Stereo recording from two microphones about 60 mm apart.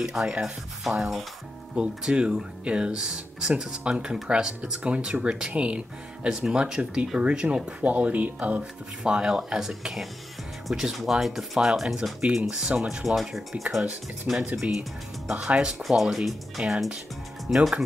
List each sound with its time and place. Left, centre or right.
0.0 s speech: centre